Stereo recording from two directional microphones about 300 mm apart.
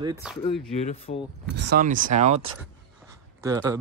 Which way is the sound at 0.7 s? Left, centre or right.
Left.